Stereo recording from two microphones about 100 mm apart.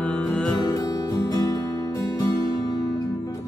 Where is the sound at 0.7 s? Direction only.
40° left (ahead or behind).